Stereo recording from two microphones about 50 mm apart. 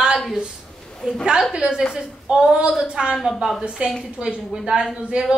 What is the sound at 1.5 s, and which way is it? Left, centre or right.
Speech, centre.